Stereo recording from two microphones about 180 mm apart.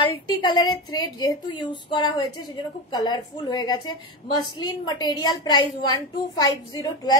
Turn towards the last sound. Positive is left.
turn(degrees=20)  # may be behind; listen again after turning